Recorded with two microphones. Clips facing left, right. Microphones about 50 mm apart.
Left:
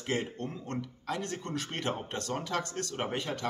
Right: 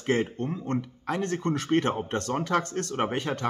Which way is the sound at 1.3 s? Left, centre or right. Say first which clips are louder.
Right 11 dB; right.